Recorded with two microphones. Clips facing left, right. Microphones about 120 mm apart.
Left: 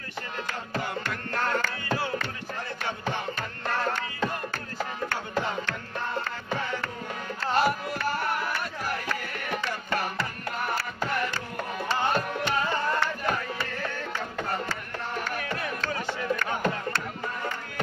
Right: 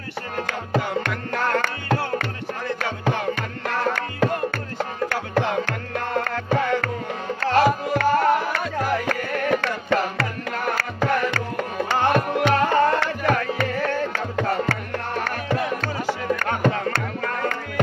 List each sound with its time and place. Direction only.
1.0 s music: 90° right; by 2.2 s 65° right (ahead or behind)
2.8 s music: 85° right
10.8 s music: 80° right
12.4 s music: 80° right
16.4 s music: 80° right
17.2 s music: 90° right